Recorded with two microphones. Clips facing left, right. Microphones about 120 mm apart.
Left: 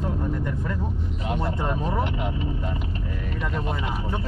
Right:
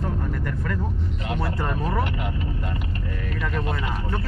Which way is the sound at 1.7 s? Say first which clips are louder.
Even; 5° left (ahead or behind).